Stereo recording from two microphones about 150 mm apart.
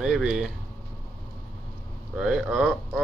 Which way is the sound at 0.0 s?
5° right (ahead or behind).